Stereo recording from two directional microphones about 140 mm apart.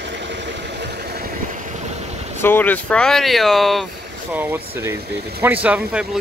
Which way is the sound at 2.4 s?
15° left (ahead or behind).